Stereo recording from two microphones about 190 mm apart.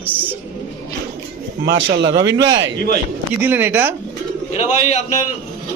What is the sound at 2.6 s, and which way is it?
Speech, 55° right (ahead or behind).